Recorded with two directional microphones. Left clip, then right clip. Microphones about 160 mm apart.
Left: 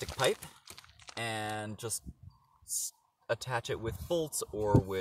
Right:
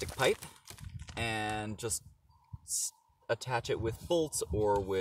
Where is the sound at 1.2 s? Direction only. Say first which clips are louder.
Right 2 dB; 40° right (ahead or behind).